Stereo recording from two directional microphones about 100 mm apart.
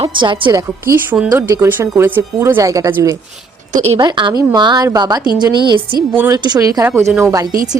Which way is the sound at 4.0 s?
50° right (ahead or behind).